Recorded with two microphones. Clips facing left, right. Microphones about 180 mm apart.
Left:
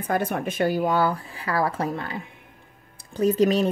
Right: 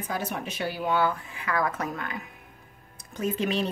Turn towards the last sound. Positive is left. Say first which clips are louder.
# left 8 dB
turn(degrees=40)  # may be behind; listen again after turning